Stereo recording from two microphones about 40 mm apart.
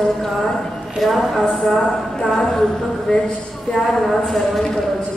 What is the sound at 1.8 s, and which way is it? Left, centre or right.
Speech, left.